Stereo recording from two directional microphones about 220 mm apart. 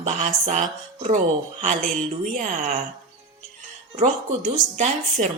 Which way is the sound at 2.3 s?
35° right (ahead or behind).